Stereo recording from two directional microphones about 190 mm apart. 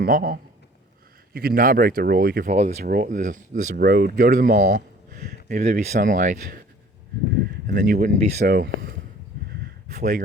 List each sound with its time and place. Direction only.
0.0 s speech: 50° right (ahead or behind)
2.8 s speech: 50° right (ahead or behind)
7.7 s speech: 45° right (ahead or behind)
9.9 s speech: 45° right (ahead or behind)